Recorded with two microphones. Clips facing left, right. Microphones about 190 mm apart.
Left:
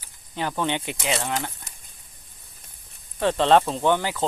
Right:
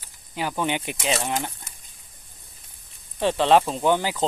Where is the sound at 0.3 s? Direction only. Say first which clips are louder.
Even; 10° right (ahead or behind).